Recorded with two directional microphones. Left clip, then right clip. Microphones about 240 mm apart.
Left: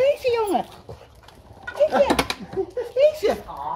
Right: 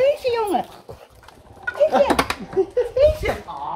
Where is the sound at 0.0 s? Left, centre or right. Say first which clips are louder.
Right 1 dB; centre.